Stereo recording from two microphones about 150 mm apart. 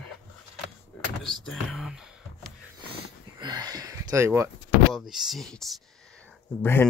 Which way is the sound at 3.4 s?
25° right (ahead or behind).